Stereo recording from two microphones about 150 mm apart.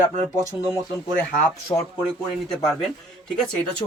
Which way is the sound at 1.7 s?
15° left (ahead or behind).